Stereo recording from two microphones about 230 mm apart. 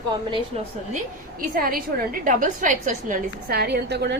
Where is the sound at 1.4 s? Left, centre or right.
Right.